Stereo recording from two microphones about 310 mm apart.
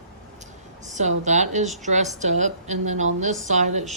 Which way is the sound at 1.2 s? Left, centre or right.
Right.